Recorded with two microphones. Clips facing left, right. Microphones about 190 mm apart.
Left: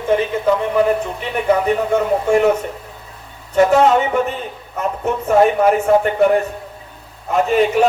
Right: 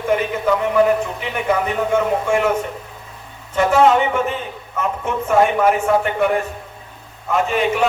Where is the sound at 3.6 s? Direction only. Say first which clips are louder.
Left 2 dB; 40° left (ahead or behind).